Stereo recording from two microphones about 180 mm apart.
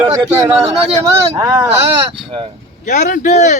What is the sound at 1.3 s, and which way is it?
Speech, 15° right (ahead or behind).